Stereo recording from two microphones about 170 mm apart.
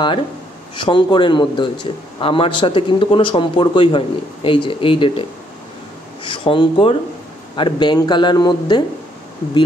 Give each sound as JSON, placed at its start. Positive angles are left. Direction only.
{"t": 0.7, "sound": "speech", "side_deg": 30}